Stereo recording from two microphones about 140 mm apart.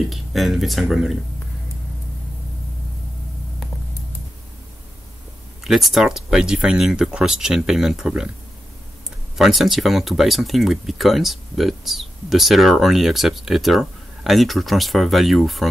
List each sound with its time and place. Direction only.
0.1 s speech: centre (ahead or behind)
5.6 s speech: centre (ahead or behind)
9.4 s speech: centre (ahead or behind)